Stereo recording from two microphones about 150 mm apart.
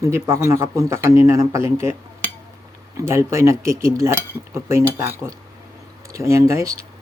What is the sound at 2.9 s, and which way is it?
Speech, 20° right (ahead or behind).